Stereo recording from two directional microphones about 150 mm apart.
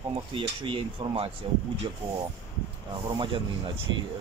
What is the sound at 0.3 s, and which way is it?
Speech, 35° right (ahead or behind).